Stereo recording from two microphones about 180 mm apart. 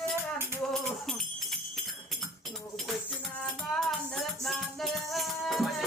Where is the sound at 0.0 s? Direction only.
15° right (ahead or behind).